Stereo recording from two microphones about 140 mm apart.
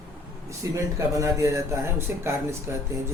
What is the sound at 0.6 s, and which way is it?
Speech, 20° right (ahead or behind).